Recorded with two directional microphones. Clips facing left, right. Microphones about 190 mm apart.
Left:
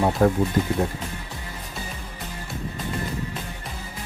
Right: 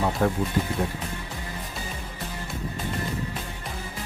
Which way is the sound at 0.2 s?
40° left (ahead or behind).